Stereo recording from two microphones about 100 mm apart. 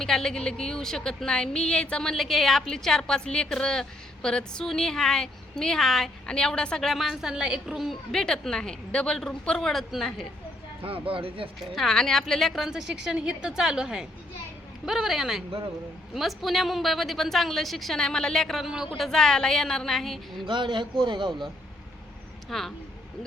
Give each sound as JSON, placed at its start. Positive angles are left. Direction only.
{"t": 0.0, "sound": "a woman's voice", "side_deg": 5}
{"t": 10.8, "sound": "speech", "side_deg": -65}
{"t": 11.6, "sound": "a woman's voice", "side_deg": 0}
{"t": 18.9, "sound": "a woman's voice", "side_deg": 5}
{"t": 20.4, "sound": "a man's voice", "side_deg": -50}
{"t": 22.4, "sound": "speech", "side_deg": 5}